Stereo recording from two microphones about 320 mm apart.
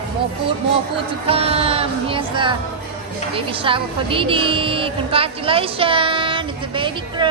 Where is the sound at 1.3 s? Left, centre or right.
Centre.